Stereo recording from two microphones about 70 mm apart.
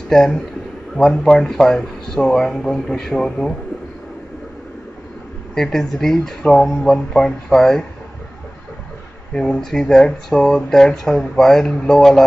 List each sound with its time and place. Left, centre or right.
0.1 s speech: centre
5.5 s speech: centre
9.3 s speech: centre